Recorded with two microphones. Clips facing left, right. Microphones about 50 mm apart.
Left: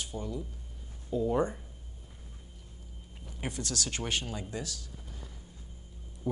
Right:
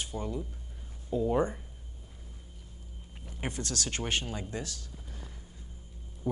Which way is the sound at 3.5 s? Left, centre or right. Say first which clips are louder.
Even; right.